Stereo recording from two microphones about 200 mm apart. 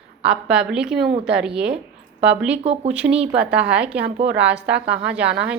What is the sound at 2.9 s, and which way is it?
A woman's voice, 5° right (ahead or behind).